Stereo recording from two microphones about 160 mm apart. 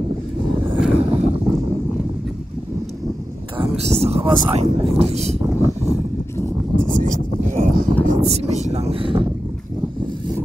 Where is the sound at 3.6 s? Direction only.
40° right (ahead or behind).